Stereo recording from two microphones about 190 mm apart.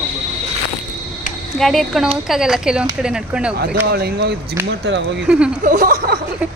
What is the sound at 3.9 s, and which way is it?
Speech, 55° right (ahead or behind).